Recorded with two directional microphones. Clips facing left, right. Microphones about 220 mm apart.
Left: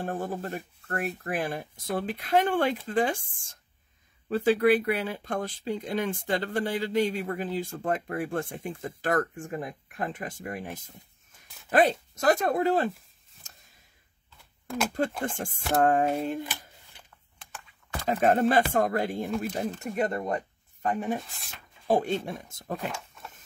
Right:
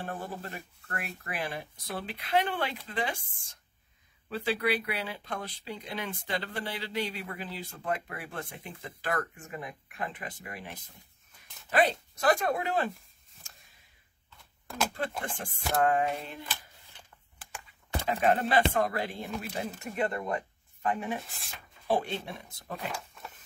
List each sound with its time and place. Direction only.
0.0 s speech: 45° left (ahead or behind)
15.2 s speech: 45° left (ahead or behind)
18.0 s speech: 45° left (ahead or behind)